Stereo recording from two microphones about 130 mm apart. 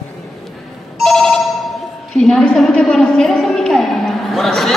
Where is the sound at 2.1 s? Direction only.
5° left (ahead or behind).